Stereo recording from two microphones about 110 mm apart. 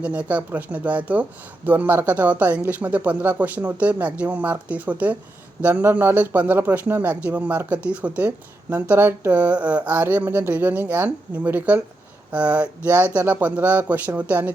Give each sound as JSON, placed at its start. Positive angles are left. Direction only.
{"t": 0.0, "sound": "speech", "side_deg": -10}